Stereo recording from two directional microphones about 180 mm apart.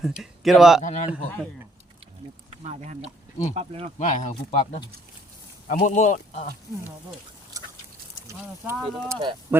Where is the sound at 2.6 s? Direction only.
40° right (ahead or behind).